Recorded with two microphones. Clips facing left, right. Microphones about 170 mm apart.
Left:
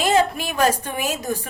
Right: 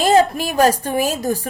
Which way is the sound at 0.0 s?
40° right (ahead or behind).